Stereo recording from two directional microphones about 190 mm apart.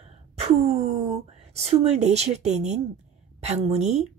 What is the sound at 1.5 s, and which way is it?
Speech, 35° right (ahead or behind).